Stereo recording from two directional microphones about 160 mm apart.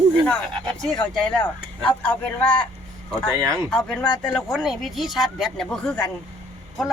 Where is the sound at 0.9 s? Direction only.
5° left (ahead or behind).